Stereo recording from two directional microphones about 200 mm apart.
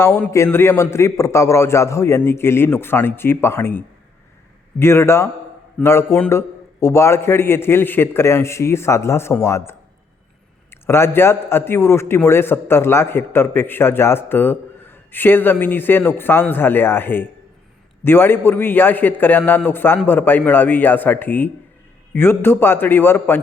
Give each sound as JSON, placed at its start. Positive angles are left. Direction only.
{"t": 0.0, "sound": "a man's voice", "side_deg": 10}